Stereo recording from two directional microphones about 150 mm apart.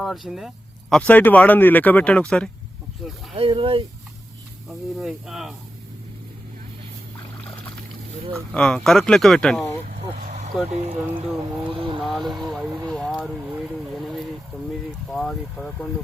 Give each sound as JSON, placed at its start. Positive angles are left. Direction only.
{"t": 0.0, "sound": "speech", "side_deg": 0}
{"t": 3.3, "sound": "speech", "side_deg": -35}
{"t": 4.7, "sound": "speech", "side_deg": 0}
{"t": 8.5, "sound": "speech", "side_deg": 5}
{"t": 10.2, "sound": "a sound", "side_deg": -50}
{"t": 10.7, "sound": "speech", "side_deg": -45}
{"t": 11.9, "sound": "speech", "side_deg": 0}
{"t": 12.9, "sound": "vehicle", "side_deg": 0}
{"t": 13.3, "sound": "speech", "side_deg": -10}
{"t": 13.9, "sound": "boat", "side_deg": 0}
{"t": 14.5, "sound": "speech", "side_deg": 10}